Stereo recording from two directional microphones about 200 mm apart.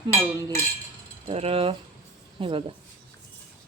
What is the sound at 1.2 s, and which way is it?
Mechanisms, 30° right (ahead or behind).